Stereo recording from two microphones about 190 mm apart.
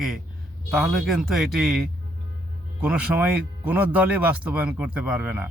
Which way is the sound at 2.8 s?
5° right (ahead or behind).